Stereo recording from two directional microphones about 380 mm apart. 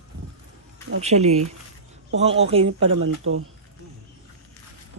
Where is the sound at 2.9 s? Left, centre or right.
Right.